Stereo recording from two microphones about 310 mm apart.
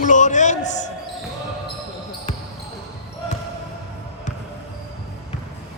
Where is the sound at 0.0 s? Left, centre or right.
Left.